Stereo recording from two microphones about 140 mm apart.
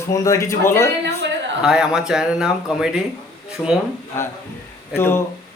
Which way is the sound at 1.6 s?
5° right (ahead or behind).